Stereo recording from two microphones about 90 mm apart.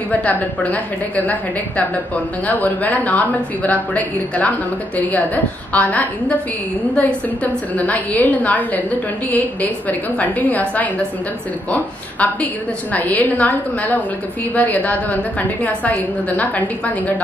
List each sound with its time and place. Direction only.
0.1 s a woman's voice: 15° left (ahead or behind)
11.7 s a woman's voice: 15° left (ahead or behind)